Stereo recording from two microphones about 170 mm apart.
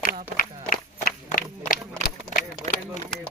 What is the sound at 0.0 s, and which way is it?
Run, 55° left (ahead or behind).